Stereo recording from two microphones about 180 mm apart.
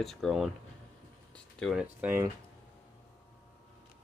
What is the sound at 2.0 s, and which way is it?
Speech, 15° right (ahead or behind).